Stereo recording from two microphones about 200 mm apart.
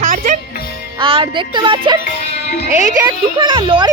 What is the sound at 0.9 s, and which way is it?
Speech, 25° right (ahead or behind).